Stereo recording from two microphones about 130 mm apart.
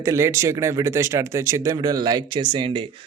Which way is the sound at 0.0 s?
20° right (ahead or behind).